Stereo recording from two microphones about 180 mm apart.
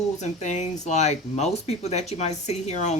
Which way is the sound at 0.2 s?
40° left (ahead or behind).